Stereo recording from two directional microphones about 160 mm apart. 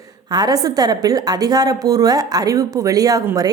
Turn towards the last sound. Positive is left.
turn(degrees=-20)  # may be behind; listen again after turning